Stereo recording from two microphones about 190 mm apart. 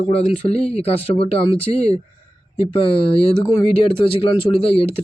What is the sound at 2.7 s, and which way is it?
Speech, 30° left (ahead or behind).